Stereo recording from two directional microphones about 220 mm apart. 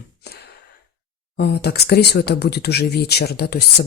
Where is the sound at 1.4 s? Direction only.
45° left (ahead or behind).